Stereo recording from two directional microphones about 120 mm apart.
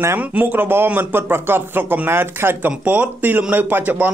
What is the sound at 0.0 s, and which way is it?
Speech, 15° right (ahead or behind).